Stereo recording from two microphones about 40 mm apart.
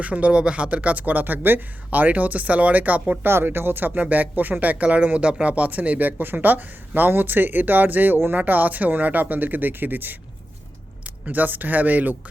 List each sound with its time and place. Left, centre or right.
0.0 s speech: right
3.2 s speech: right
4.0 s speech: right